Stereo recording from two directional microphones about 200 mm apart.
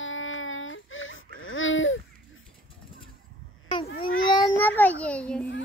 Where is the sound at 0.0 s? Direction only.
75° left (ahead or behind).